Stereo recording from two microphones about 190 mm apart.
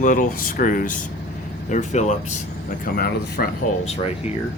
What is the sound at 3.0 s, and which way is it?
Speech, 50° left (ahead or behind).